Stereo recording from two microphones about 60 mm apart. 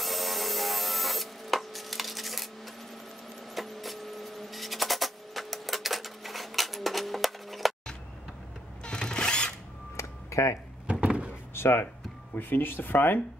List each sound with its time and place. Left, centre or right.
0.0 s rub: centre
3.5 s printer: centre
8.8 s mechanisms: centre
9.9 s a sound: left
10.9 s door: right
11.5 s speech: left